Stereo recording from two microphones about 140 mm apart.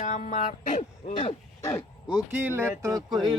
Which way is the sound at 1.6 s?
25° left (ahead or behind).